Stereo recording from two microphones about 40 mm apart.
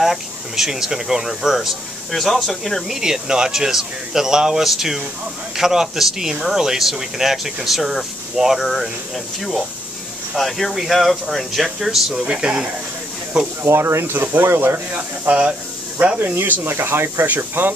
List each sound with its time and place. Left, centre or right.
0.0 s speech: centre
2.0 s speech: centre
2.9 s speech: centre
12.2 s speech: right
13.6 s speech: right
14.2 s speech: right
15.2 s speech: right
16.0 s speech: right
16.6 s speech: right
17.4 s speech: right